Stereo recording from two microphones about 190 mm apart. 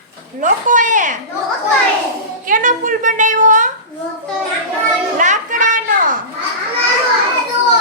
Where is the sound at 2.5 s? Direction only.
45° right (ahead or behind).